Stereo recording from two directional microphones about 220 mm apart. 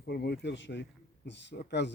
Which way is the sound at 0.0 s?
50° left (ahead or behind).